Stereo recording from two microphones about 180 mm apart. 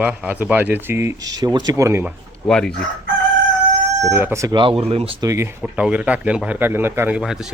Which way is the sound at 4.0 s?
15° right (ahead or behind).